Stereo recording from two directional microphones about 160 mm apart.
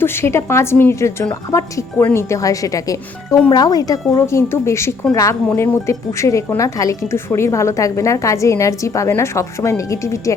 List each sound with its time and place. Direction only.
0.0 s a woman's voice: 15° left (ahead or behind)